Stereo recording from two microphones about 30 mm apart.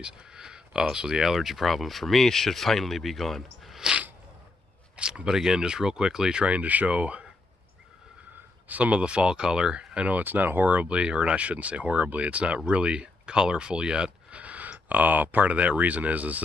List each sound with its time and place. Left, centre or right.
0.3 s a sound: right
0.9 s speech: centre
4.9 s speech: right
5.2 s speech: centre
6.4 s speech: right
8.6 s speech: right
8.9 s speech: right
10.0 s speech: right
10.8 s speech: right
14.3 s speech: right